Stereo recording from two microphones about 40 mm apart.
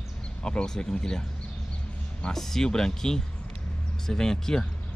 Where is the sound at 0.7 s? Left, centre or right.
Centre.